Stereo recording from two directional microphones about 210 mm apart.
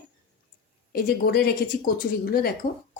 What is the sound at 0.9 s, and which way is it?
Speech, 45° left (ahead or behind).